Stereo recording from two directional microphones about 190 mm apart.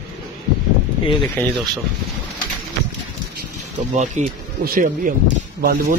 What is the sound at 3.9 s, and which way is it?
Speech, 40° right (ahead or behind).